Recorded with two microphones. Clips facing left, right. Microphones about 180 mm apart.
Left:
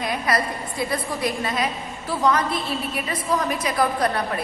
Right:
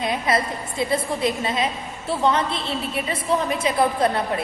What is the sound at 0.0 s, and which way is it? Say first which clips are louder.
A woman's voice: right 1 dB; 25° right (ahead or behind).